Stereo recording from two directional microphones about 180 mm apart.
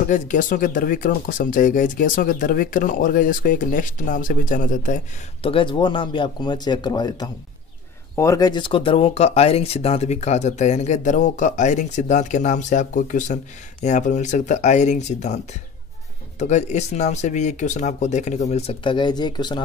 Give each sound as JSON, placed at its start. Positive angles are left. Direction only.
{"t": 0.1, "sound": "speech", "side_deg": 45}
{"t": 5.4, "sound": "speech", "side_deg": 30}